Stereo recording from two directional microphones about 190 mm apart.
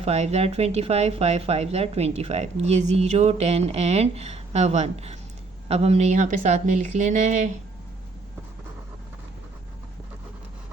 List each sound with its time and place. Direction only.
0.0 s speech: 35° right (ahead or behind)